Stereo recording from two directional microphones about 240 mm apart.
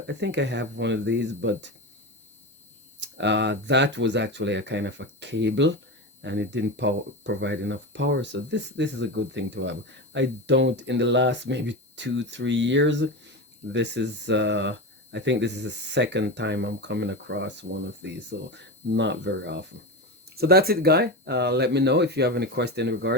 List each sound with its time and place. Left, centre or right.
0.1 s speech: right
3.0 s speech: right